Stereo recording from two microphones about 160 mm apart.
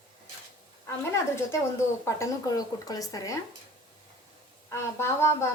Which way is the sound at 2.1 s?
20° left (ahead or behind).